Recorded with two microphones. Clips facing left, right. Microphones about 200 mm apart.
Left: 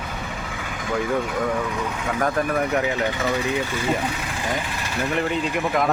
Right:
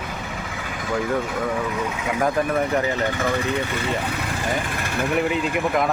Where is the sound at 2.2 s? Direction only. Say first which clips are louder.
Right 1 dB; centre (ahead or behind).